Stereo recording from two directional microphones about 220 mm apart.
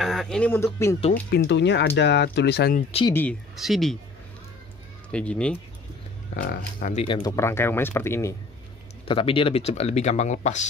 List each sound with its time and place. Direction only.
0.0 s speech: centre (ahead or behind)
1.3 s speech: 50° left (ahead or behind)
3.1 s speech: 5° left (ahead or behind)
5.1 s speech: 5° left (ahead or behind)
6.3 s speech: 40° left (ahead or behind)
7.1 s speech: 20° left (ahead or behind)
9.0 s speech: 25° left (ahead or behind)